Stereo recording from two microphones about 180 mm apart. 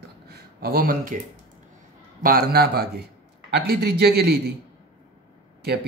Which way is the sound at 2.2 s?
55° right (ahead or behind).